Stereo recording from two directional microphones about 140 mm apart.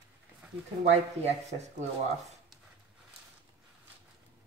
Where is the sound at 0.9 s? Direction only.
50° right (ahead or behind).